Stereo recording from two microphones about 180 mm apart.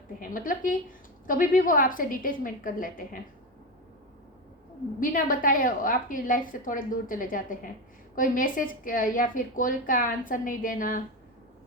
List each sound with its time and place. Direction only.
0.2 s a woman's voice: 50° left (ahead or behind)
4.9 s a woman's voice: 50° left (ahead or behind)